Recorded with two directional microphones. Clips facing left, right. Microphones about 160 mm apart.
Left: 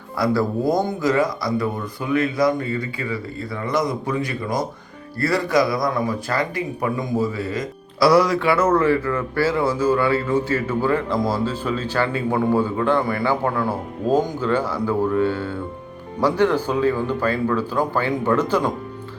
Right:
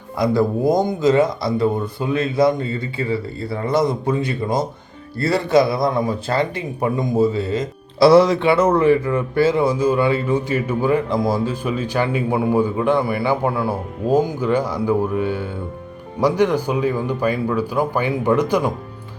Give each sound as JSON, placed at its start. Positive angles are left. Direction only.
{"t": 0.2, "sound": "speech", "side_deg": -20}